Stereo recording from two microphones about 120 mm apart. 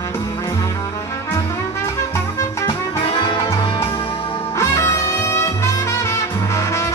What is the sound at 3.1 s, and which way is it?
Music, 45° left (ahead or behind).